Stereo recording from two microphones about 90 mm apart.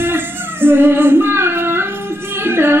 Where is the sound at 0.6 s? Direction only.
25° right (ahead or behind).